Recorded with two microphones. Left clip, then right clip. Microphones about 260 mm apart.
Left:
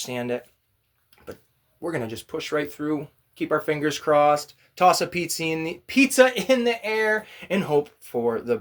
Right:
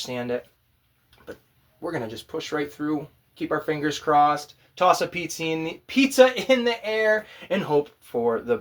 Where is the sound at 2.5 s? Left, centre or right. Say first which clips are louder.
Left 2 dB; left.